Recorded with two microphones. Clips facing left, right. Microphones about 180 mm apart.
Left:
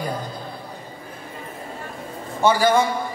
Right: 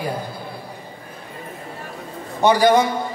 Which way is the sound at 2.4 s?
20° right (ahead or behind).